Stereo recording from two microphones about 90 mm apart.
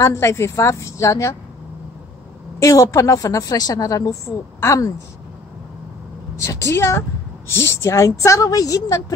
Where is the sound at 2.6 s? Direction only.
40° left (ahead or behind).